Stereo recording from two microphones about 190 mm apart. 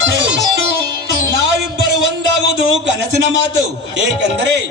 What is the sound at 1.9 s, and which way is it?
Music, 65° right (ahead or behind).